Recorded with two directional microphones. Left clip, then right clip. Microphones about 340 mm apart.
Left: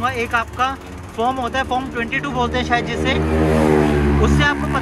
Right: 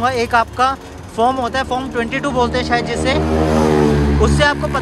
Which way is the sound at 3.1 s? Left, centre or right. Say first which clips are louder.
Right 2 dB; right.